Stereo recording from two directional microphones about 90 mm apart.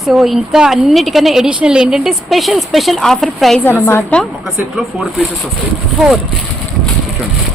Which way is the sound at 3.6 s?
25° left (ahead or behind).